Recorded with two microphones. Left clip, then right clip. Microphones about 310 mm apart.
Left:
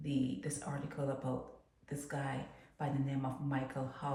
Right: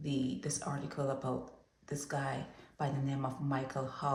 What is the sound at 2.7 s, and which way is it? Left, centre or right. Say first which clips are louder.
Speech: right 2 dB; centre.